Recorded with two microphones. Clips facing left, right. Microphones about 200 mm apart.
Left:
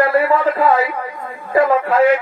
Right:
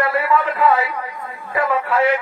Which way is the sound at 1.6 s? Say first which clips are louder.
Left 7 dB; 40° left (ahead or behind).